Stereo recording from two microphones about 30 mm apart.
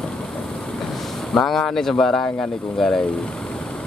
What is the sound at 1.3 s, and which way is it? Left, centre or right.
Speech, centre.